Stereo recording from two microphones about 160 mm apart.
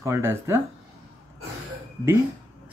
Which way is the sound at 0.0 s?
15° right (ahead or behind).